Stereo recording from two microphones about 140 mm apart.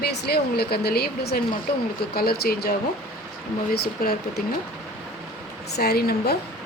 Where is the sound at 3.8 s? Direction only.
90° left.